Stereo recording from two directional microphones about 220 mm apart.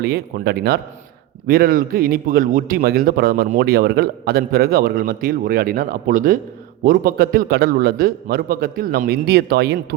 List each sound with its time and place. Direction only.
0.0 s a man's voice: 45° right (ahead or behind)